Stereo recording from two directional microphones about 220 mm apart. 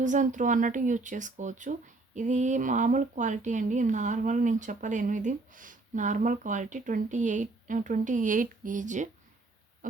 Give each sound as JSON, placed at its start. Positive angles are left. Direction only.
{"t": 0.0, "sound": "speech", "side_deg": -35}